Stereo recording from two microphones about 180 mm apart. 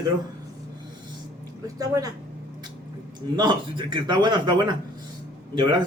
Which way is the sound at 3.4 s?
25° right (ahead or behind).